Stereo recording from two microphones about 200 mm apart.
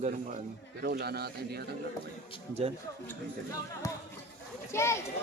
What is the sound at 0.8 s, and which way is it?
Speech, 55° right (ahead or behind).